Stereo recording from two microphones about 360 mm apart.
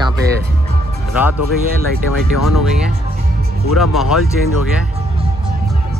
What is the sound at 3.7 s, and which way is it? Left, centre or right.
Speech, centre.